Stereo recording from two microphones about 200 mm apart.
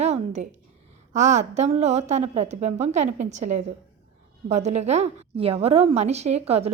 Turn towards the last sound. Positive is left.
turn(degrees=-30)  # may be behind; listen again after turning